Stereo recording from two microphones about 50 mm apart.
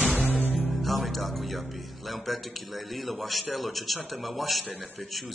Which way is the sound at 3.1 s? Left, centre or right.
Centre.